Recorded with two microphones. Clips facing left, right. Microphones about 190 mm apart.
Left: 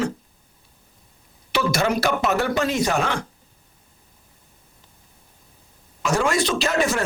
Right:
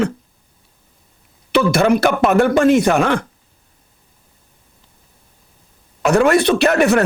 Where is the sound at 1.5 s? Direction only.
55° right (ahead or behind).